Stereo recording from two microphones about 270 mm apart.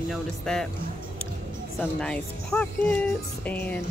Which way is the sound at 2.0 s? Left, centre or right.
Centre.